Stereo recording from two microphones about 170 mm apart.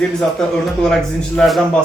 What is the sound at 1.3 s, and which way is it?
Speech, centre (ahead or behind).